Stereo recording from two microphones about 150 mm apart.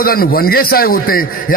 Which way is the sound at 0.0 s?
80° left.